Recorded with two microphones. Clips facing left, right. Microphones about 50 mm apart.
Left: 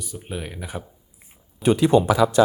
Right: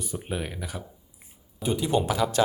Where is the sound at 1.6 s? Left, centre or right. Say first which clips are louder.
Left 9 dB; left.